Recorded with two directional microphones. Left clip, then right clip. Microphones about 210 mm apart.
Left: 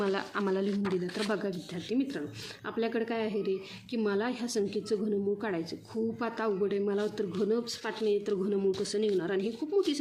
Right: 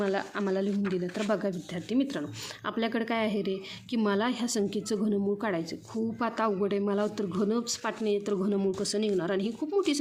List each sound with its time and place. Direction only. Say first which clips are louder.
0.0 s speech: right 1 dB; 10° right (ahead or behind)
1.2 s speech: right 3 dB; 20° right (ahead or behind)